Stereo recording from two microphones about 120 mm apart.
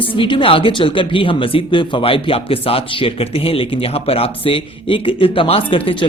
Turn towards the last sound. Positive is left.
turn(degrees=45)  # may be behind; listen again after turning